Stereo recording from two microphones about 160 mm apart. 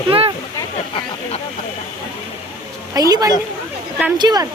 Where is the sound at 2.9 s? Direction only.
25° right (ahead or behind).